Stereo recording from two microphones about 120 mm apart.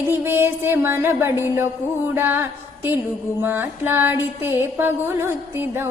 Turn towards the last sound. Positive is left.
turn(degrees=-20)  # may be behind; listen again after turning